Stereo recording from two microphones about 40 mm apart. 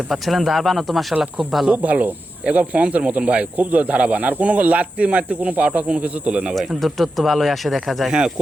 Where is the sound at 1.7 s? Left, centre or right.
Right.